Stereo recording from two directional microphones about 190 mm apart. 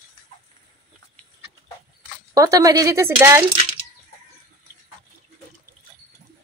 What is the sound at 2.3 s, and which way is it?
Speech, 15° right (ahead or behind).